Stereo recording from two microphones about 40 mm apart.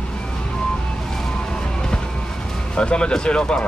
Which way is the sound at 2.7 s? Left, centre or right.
Left.